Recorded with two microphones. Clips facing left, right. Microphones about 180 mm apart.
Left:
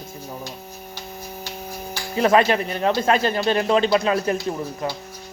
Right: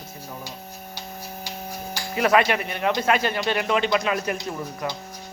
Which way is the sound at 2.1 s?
30° left (ahead or behind).